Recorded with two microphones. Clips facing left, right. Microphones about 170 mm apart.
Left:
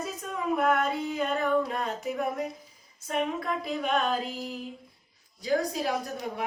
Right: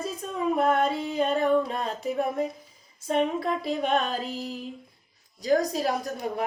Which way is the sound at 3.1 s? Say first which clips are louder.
Right 4 dB; 30° right (ahead or behind).